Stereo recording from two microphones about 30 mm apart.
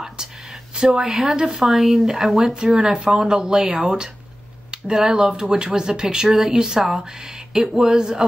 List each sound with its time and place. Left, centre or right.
0.2 s a sound: right
0.7 s speech: right
1.6 s speech: centre
2.8 s speech: right
4.9 s speech: centre